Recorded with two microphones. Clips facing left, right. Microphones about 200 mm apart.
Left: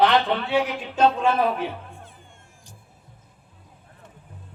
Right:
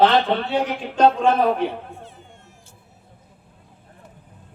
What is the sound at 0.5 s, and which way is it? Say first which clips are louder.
Speech: right 1 dB; 45° right (ahead or behind).